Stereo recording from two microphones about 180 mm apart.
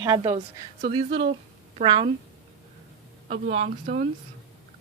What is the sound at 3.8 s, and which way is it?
Speech, 55° right (ahead or behind).